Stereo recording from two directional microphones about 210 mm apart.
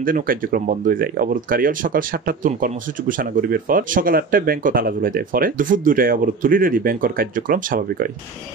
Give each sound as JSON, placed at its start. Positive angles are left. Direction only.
{"t": 0.0, "sound": "speech", "side_deg": -40}